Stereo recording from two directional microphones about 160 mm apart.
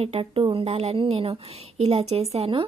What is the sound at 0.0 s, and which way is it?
Speech, 35° right (ahead or behind).